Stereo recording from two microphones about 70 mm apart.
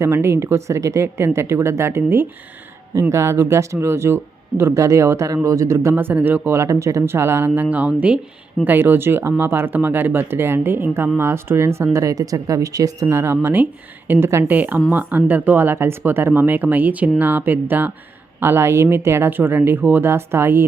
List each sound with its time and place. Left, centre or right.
0.0 s speech: right
2.9 s speech: right
6.1 s speech: right
6.5 s speech: right
11.9 s speech: right
13.1 s speech: right
14.4 s speech: right